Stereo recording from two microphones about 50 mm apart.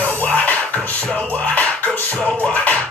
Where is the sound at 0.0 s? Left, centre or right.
Left.